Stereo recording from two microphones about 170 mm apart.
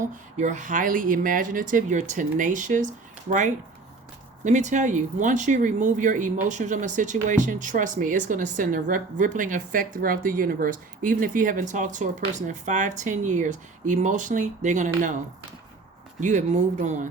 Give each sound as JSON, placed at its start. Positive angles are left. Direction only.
{"t": 0.3, "sound": "speech", "side_deg": -45}
{"t": 16.2, "sound": "speech", "side_deg": -45}